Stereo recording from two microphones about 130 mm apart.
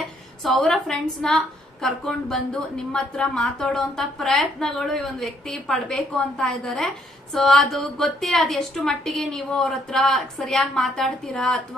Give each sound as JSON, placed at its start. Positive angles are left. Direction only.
{"t": 0.4, "sound": "a woman's voice", "side_deg": 0}